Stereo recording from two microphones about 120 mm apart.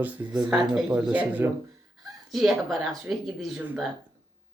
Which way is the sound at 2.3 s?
Centre (ahead or behind).